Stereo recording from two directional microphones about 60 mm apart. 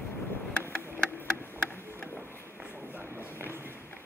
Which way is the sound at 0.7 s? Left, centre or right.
Left.